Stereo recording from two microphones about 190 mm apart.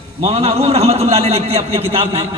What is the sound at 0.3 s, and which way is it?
A man's voice, 30° right (ahead or behind).